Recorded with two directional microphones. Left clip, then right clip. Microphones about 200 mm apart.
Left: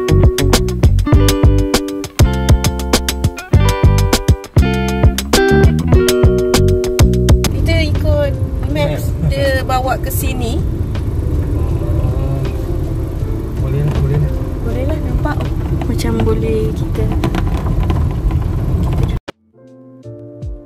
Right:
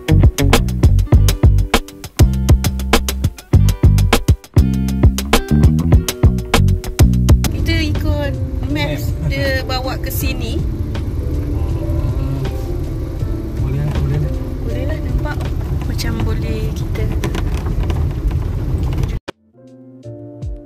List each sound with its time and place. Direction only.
0.0 s music: centre (ahead or behind)
7.9 s vehicle: 10° left (ahead or behind)
17.2 s vehicle: 45° left (ahead or behind)